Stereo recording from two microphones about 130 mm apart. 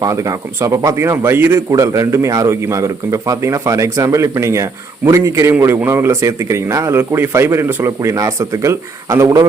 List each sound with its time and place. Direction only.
0.0 s a man's voice: 25° right (ahead or behind)